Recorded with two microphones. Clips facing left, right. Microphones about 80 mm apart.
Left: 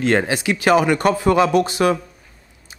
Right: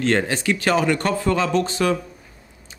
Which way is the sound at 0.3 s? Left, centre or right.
Centre.